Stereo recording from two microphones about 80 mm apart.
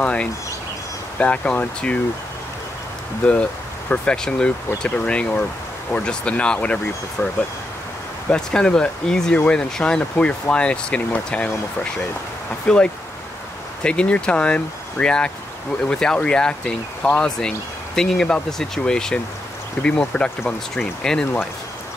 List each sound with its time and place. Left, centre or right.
0.0 s speech: centre
3.9 s speech: centre